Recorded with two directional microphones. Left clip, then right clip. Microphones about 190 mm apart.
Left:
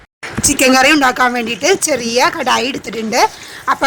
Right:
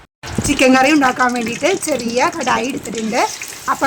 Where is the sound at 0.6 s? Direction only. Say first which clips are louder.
Left 2 dB; 45° left (ahead or behind).